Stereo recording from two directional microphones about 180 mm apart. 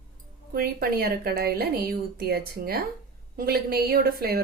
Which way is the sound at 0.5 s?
55° right (ahead or behind).